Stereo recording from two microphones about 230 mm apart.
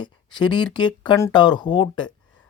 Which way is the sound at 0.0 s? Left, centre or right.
Centre.